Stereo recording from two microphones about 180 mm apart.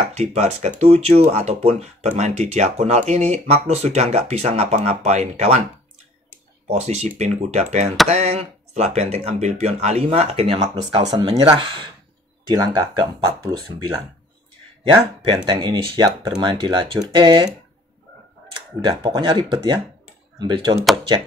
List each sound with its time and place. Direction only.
0.1 s speech: 35° right (ahead or behind)
6.8 s speech: 40° right (ahead or behind); by 13.9 s 20° right (ahead or behind)
15.2 s speech: 25° right (ahead or behind)
18.9 s speech: 25° right (ahead or behind)